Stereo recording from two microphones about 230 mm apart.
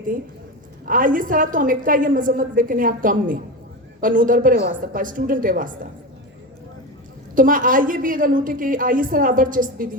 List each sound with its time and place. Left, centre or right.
0.9 s a woman's voice: right
7.3 s a woman's voice: right